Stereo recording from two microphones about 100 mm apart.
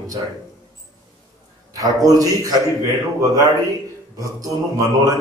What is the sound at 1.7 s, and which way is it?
Mantra, 35° right (ahead or behind).